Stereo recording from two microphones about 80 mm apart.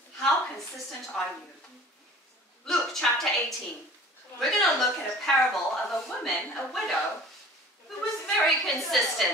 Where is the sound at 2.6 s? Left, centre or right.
Centre.